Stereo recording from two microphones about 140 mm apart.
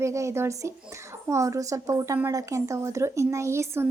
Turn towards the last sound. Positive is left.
turn(degrees=-20)  # may be behind; listen again after turning